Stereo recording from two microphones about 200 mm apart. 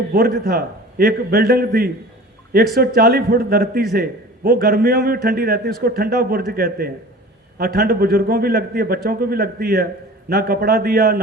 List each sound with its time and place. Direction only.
0.1 s a man's voice: 50° right (ahead or behind)